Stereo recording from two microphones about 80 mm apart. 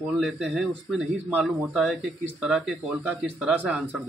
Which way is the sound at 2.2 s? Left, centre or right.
Centre.